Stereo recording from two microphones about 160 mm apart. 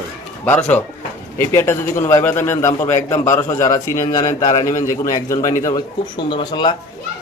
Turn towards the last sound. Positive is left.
turn(degrees=30)  # may be behind; listen again after turning